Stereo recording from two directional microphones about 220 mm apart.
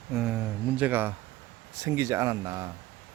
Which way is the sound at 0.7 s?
5° right (ahead or behind).